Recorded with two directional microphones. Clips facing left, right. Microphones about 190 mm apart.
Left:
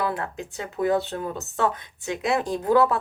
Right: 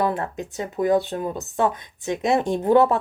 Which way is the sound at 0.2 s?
20° right (ahead or behind).